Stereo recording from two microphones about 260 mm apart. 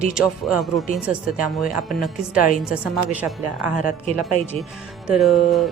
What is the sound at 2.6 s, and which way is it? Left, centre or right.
Speech, centre.